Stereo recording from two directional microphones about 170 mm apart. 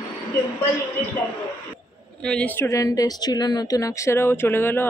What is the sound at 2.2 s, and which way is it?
Speech, 5° left (ahead or behind).